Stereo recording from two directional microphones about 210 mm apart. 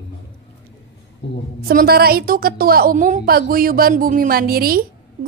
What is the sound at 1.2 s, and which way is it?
Speech, 60° left (ahead or behind).